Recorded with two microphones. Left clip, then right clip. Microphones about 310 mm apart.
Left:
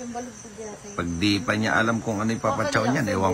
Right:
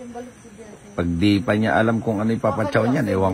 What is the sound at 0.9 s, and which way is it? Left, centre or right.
Speech, centre.